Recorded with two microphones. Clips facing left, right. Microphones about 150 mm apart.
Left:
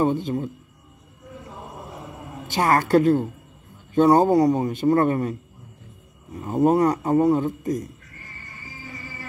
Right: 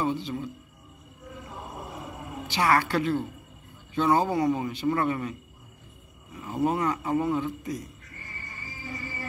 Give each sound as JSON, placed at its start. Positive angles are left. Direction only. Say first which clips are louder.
{"t": 0.0, "sound": "a man's voice", "louder": "left 7 dB", "side_deg": 50}
{"t": 2.4, "sound": "a man's voice", "louder": "left 3 dB", "side_deg": 45}
{"t": 6.3, "sound": "a man's voice", "louder": "left 8 dB", "side_deg": 45}